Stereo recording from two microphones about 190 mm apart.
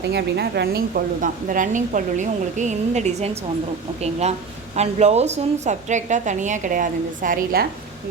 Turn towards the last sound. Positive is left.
turn(degrees=-50)  # may be behind; listen again after turning